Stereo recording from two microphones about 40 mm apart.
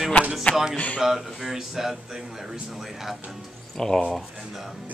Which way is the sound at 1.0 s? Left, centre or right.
Centre.